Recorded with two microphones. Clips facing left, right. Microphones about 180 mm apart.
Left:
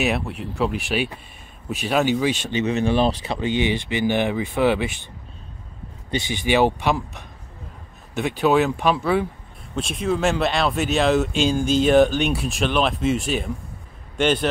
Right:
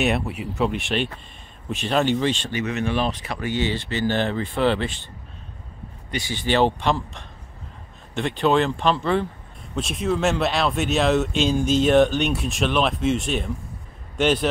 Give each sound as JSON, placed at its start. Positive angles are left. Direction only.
{"t": 0.0, "sound": "speech", "side_deg": 0}
{"t": 2.5, "sound": "speech", "side_deg": 30}
{"t": 6.0, "sound": "speech", "side_deg": 20}